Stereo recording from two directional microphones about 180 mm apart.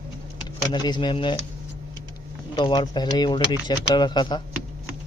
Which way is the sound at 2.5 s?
25° left (ahead or behind).